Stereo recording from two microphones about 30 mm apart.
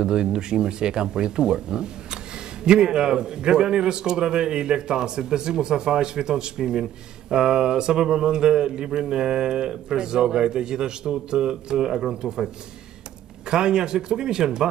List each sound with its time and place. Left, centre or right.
0.0 s a man's voice: right
13.5 s a man's voice: right